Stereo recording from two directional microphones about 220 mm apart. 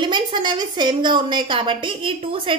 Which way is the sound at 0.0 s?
20° right (ahead or behind).